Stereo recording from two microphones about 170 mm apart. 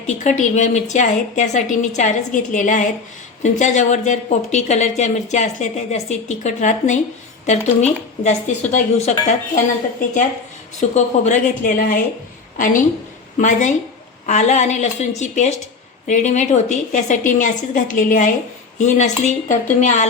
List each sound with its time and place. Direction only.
0.1 s speech: 45° left (ahead or behind)
10.8 s a woman's voice: 45° left (ahead or behind)